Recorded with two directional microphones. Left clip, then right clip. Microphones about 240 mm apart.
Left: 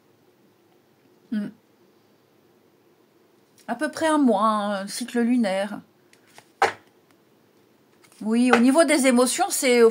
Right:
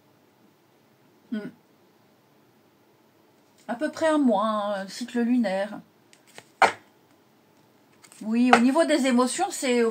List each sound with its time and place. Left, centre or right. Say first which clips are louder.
3.6 s speech: left 1 dB; left
6.4 s a sound: right 3 dB; centre
8.3 s speech: left 1 dB; left